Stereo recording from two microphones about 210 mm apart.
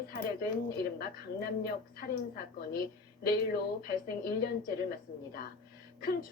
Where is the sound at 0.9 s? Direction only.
45° left (ahead or behind).